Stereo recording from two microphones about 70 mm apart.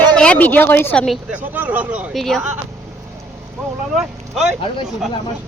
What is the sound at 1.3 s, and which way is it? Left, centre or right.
Speech, right.